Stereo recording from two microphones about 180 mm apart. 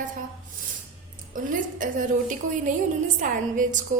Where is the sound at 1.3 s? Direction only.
50° right (ahead or behind).